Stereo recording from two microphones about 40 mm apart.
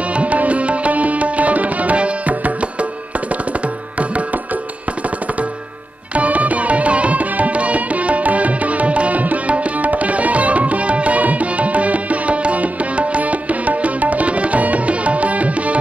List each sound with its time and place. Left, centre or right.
0.1 s tabla: right
6.1 s music: right